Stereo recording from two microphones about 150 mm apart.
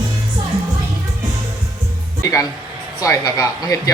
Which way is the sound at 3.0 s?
20° left (ahead or behind).